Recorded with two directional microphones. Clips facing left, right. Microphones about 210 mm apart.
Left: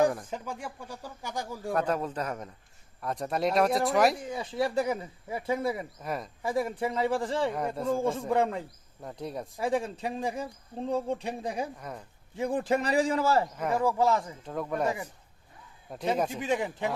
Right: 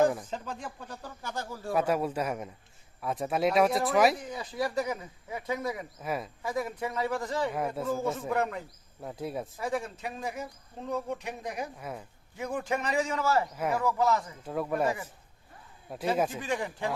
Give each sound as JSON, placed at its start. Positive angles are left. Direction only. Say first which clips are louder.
{"t": 0.3, "sound": "speech", "louder": "left 1 dB", "side_deg": 10}
{"t": 1.7, "sound": "a man's voice", "louder": "right 2 dB", "side_deg": -10}
{"t": 4.3, "sound": "speech", "louder": "left 3 dB", "side_deg": 25}
{"t": 6.0, "sound": "speech", "louder": "right 1 dB", "side_deg": -5}
{"t": 6.4, "sound": "speech", "louder": "left 7 dB", "side_deg": 30}
{"t": 9.0, "sound": "speech", "louder": "right 1 dB", "side_deg": -5}
{"t": 9.6, "sound": "speech", "louder": "left 7 dB", "side_deg": 30}
{"t": 11.8, "sound": "speech", "louder": "right 1 dB", "side_deg": -5}
{"t": 12.4, "sound": "speech", "louder": "left 4 dB", "side_deg": 30}
{"t": 14.4, "sound": "speech", "louder": "right 4 dB", "side_deg": -5}
{"t": 16.1, "sound": "speech", "louder": "right 2 dB", "side_deg": -5}
{"t": 16.4, "sound": "speech", "louder": "left 3 dB", "side_deg": 20}